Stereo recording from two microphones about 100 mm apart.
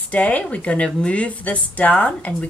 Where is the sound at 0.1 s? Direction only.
15° left (ahead or behind).